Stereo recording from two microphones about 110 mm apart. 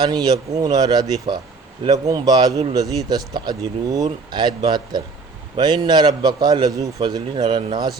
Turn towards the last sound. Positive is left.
turn(degrees=-40)  # may be behind; listen again after turning